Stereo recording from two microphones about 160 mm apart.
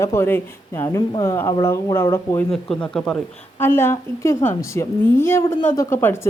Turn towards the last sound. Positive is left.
turn(degrees=15)  # may be behind; listen again after turning